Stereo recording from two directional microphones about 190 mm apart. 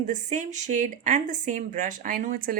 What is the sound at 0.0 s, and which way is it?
Speech, 40° right (ahead or behind).